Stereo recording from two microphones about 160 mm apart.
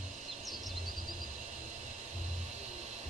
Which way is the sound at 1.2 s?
50° right (ahead or behind).